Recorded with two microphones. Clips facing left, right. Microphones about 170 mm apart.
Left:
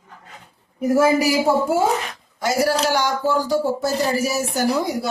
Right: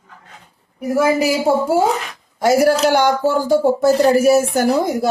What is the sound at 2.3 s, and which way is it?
Speech, 50° right (ahead or behind).